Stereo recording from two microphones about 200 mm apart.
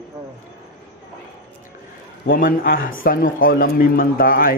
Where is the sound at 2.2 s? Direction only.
45° left (ahead or behind).